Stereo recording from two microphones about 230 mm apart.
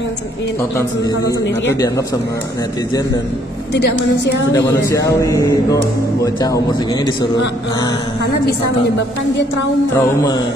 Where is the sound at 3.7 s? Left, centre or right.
Left.